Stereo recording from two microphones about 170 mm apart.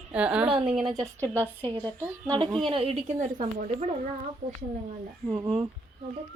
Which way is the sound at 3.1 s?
45° right (ahead or behind).